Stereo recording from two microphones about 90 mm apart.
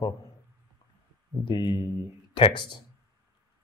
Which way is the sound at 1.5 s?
55° left (ahead or behind).